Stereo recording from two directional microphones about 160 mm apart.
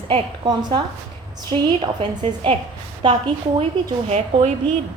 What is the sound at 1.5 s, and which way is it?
A woman's voice, 40° right (ahead or behind).